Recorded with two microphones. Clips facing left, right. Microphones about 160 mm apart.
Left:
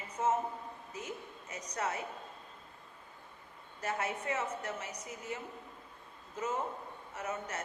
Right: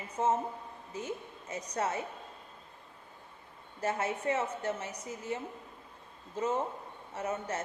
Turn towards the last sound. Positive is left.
turn(degrees=-30)  # may be behind; listen again after turning